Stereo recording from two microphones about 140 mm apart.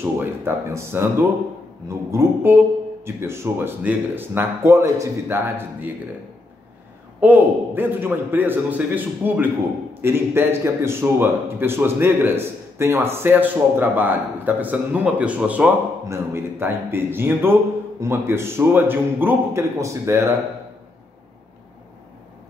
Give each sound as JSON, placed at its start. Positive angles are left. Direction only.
{"t": 0.0, "sound": "a man's voice", "side_deg": -15}
{"t": 7.2, "sound": "a man's voice", "side_deg": -10}